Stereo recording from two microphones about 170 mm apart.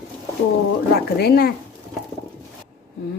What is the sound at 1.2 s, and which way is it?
Speech, 65° left (ahead or behind).